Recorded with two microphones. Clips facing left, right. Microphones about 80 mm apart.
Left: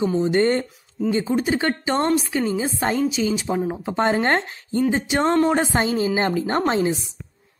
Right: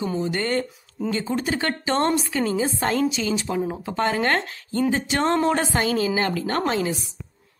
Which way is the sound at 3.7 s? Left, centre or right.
Left.